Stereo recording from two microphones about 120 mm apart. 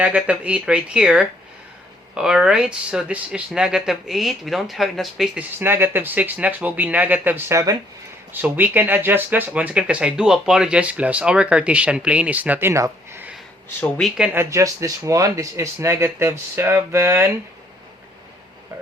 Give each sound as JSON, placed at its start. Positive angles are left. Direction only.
{"t": 0.0, "sound": "speech", "side_deg": -10}
{"t": 5.5, "sound": "speech", "side_deg": -20}
{"t": 13.8, "sound": "speech", "side_deg": 10}
{"t": 14.3, "sound": "speech", "side_deg": -25}